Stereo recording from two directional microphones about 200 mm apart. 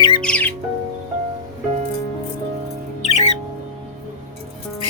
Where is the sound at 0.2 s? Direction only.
5° left (ahead or behind).